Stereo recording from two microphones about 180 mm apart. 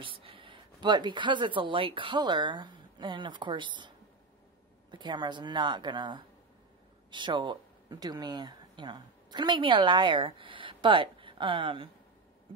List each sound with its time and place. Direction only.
0.0 s speech: 30° right (ahead or behind)
4.9 s a woman's voice: 25° right (ahead or behind)